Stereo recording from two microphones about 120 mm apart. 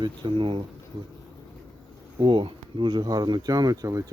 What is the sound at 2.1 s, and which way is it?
Speech, 40° right (ahead or behind).